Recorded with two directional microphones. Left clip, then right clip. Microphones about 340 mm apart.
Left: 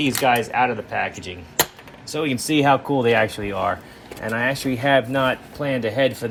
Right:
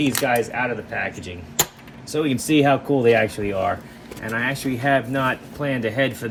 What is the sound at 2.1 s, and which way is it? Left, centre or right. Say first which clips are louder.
Speech: right 2 dB; centre.